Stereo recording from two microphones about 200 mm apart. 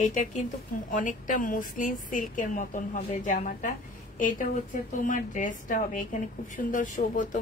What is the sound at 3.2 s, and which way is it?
A woman's voice, 40° left (ahead or behind).